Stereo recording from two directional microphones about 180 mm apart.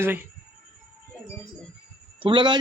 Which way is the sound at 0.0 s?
10° right (ahead or behind).